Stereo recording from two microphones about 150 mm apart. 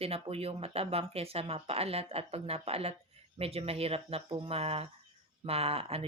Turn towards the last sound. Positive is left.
turn(degrees=-40)  # may be behind; listen again after turning